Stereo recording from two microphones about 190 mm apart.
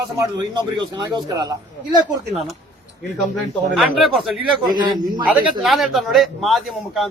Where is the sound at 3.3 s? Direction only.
Centre (ahead or behind).